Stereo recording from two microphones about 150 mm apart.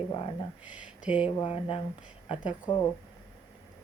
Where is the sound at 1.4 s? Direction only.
35° left (ahead or behind).